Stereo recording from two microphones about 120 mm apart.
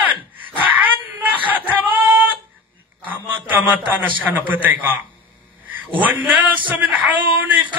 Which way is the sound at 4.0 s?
15° right (ahead or behind).